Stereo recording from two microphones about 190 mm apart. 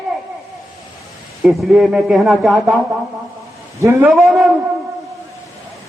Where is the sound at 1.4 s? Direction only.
Centre (ahead or behind).